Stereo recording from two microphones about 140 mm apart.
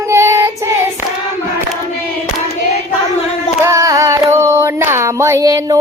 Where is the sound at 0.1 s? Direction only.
20° right (ahead or behind).